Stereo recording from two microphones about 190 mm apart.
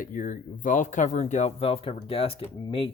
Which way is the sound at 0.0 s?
45° left (ahead or behind).